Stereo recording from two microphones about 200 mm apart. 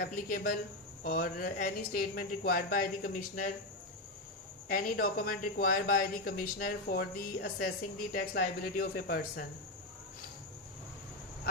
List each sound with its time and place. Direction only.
0.0 s speech: 50° left (ahead or behind)
4.7 s speech: 45° left (ahead or behind)